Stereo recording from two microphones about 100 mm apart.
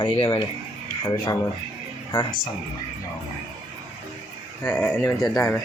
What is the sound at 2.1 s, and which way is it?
Speech, 45° left (ahead or behind).